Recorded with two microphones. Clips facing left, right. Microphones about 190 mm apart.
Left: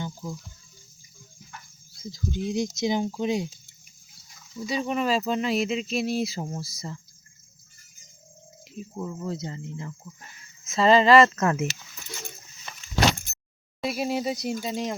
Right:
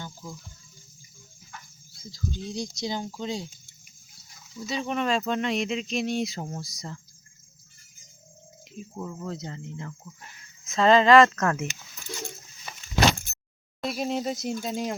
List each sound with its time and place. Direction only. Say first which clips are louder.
0.0 s water: left 6 dB; 20° left (ahead or behind)
2.1 s speech: left 5 dB; 20° left (ahead or behind)
4.6 s speech: left 2 dB; 5° left (ahead or behind)
8.7 s speech: left 2 dB; 5° left (ahead or behind)
12.7 s keys jangling: right 1 dB; 10° right (ahead or behind)
13.8 s speech: left 1 dB; 5° left (ahead or behind)